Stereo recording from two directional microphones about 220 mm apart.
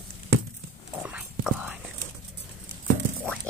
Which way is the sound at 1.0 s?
5° right (ahead or behind).